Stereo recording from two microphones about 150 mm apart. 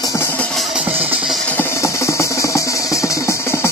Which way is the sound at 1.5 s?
15° left (ahead or behind).